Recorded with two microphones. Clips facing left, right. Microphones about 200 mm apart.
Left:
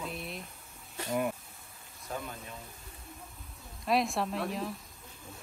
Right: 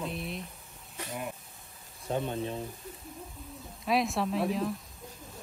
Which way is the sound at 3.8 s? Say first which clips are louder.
Right 1 dB; centre (ahead or behind).